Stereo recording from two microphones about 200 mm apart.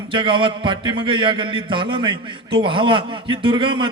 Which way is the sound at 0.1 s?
25° right (ahead or behind).